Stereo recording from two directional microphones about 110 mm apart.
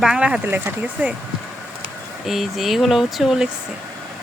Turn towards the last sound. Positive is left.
turn(degrees=-5)  # may be behind; listen again after turning